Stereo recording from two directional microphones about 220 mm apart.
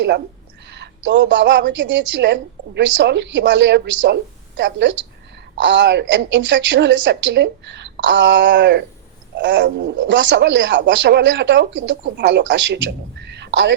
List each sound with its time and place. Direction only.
0.7 s speech: 50° right (ahead or behind)